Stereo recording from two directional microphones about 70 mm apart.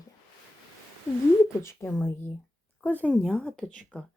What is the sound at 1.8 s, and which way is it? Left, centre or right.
Speech, left.